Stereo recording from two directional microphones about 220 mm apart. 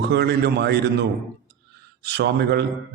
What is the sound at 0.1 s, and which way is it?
A man's voice, 50° right (ahead or behind).